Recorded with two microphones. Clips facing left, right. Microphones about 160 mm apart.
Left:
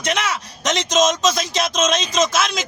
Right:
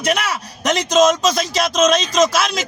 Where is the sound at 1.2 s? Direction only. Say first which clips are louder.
Right 2 dB; 35° right (ahead or behind).